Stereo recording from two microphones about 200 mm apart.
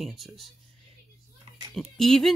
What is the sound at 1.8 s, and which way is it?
Speech, centre (ahead or behind).